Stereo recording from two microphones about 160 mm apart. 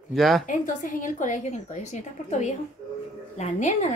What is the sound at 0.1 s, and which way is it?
Speech, centre (ahead or behind).